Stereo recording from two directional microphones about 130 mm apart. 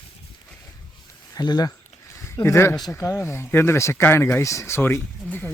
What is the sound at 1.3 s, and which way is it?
Speech, 30° left (ahead or behind).